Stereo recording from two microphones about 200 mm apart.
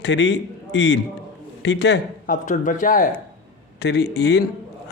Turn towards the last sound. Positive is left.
turn(degrees=55)  # may be behind; listen again after turning